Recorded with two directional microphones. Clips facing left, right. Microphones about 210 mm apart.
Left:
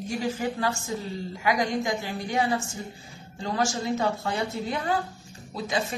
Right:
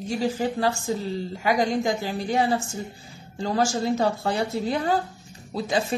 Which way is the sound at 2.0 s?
35° right (ahead or behind).